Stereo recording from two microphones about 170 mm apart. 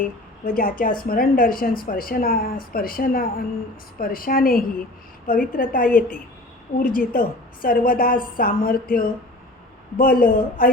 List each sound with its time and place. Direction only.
0.0 s a woman's voice: 55° left (ahead or behind)